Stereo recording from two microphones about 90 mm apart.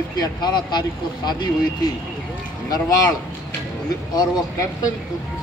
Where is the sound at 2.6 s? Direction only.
45° left (ahead or behind).